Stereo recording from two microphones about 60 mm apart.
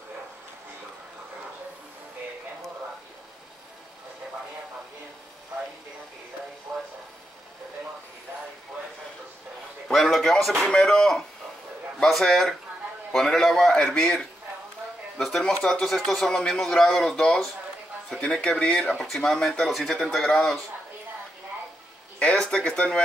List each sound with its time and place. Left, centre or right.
6.7 s a sound: right
9.8 s speech: centre
13.8 s speech: centre
15.1 s speech: centre
18.9 s speech: centre
22.2 s speech: centre